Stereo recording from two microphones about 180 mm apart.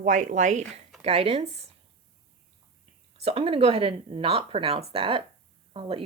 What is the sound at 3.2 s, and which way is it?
Speech, 35° right (ahead or behind).